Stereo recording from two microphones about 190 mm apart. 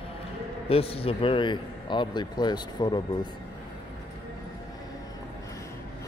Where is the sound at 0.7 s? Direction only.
30° left (ahead or behind).